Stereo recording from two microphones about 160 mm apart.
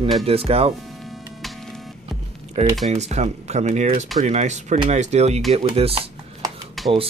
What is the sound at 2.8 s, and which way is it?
Speech, 45° right (ahead or behind).